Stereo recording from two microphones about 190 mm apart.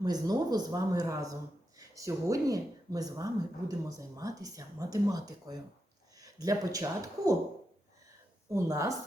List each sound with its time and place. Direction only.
0.0 s speech: 20° right (ahead or behind)
8.4 s a woman's voice: 15° right (ahead or behind)